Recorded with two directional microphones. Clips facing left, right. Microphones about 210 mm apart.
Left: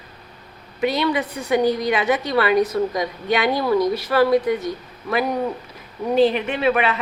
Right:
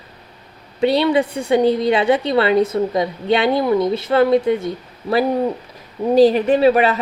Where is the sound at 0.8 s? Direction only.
30° right (ahead or behind).